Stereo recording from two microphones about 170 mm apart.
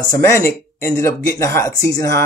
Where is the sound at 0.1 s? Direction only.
15° left (ahead or behind).